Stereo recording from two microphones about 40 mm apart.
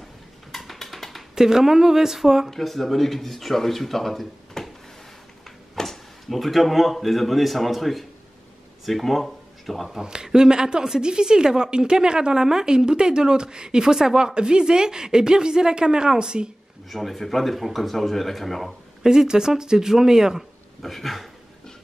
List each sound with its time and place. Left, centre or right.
0.5 s a sound: centre
1.3 s speech: centre
2.5 s speech: centre
5.8 s speech: centre
9.9 s a woman's voice: centre
16.9 s speech: centre
19.0 s speech: centre
20.8 s speech: centre